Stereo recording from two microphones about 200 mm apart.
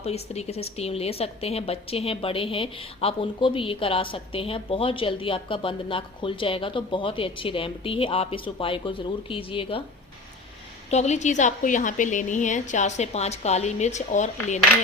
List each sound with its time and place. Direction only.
0.0 s a woman's voice: 30° left (ahead or behind)
10.9 s a woman's voice: 35° left (ahead or behind)